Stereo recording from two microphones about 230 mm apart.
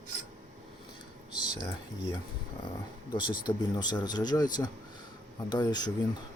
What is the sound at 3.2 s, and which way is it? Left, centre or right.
Speech, centre.